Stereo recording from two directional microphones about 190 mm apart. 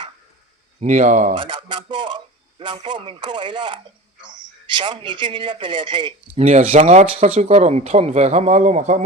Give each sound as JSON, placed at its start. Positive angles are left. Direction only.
{"t": 0.8, "sound": "a man's voice", "side_deg": -35}
{"t": 1.4, "sound": "speech", "side_deg": -25}
{"t": 6.3, "sound": "a man's voice", "side_deg": -35}